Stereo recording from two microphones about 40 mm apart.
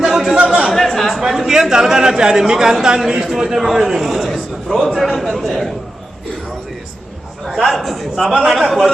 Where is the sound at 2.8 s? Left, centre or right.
Centre.